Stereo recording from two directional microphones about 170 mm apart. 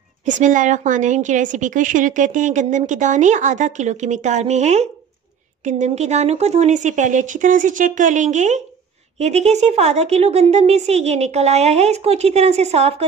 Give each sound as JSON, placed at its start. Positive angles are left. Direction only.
{"t": 0.2, "sound": "a woman's voice", "side_deg": -45}